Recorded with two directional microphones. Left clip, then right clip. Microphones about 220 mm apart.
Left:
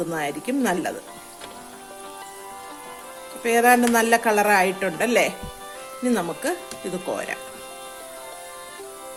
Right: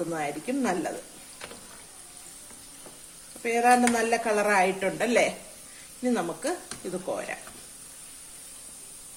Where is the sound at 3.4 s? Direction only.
45° left (ahead or behind).